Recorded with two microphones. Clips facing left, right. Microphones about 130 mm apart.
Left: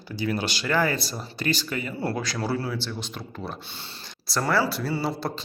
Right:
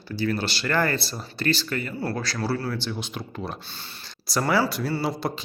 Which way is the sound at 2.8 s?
Centre (ahead or behind).